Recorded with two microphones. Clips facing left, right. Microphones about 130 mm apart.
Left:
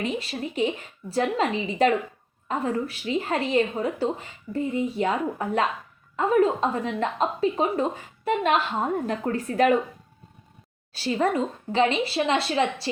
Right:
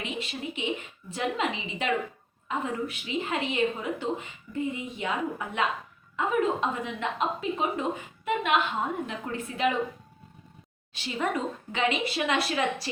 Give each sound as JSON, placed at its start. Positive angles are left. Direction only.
{"t": 0.0, "sound": "a woman's voice", "side_deg": 40}
{"t": 10.9, "sound": "a woman's voice", "side_deg": 35}